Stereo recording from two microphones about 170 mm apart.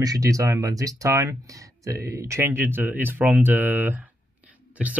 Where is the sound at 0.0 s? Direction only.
20° right (ahead or behind).